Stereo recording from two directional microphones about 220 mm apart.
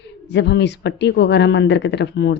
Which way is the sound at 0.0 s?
50° left (ahead or behind).